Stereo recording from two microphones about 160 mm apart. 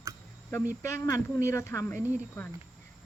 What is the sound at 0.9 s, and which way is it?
Speech, 20° left (ahead or behind).